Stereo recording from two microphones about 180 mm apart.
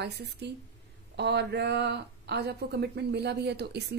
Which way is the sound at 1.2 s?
70° right (ahead or behind).